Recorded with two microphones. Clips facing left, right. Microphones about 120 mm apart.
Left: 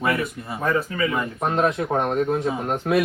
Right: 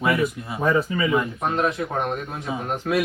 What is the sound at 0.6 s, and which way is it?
Speech, 20° right (ahead or behind).